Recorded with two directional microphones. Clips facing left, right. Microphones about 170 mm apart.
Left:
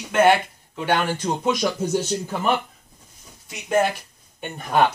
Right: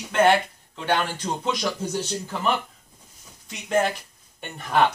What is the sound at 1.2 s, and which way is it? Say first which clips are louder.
Speech: left 5 dB; 15° left (ahead or behind).